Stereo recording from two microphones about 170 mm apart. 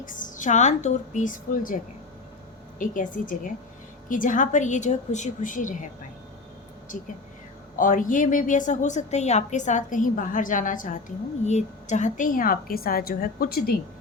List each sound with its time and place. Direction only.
0.0 s a woman's voice: 50° left (ahead or behind)